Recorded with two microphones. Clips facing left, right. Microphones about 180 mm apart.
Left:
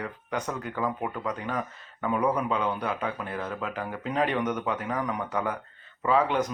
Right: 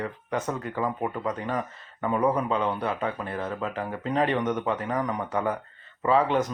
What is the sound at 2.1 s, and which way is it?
A man's voice, centre (ahead or behind).